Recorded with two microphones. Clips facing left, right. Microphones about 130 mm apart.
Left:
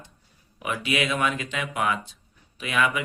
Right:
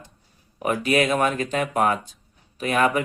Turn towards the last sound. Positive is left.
turn(degrees=-40)  # may be behind; listen again after turning